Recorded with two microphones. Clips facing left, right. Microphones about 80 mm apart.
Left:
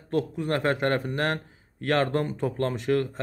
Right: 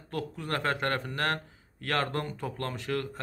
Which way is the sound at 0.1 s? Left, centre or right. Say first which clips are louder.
Left 7 dB; left.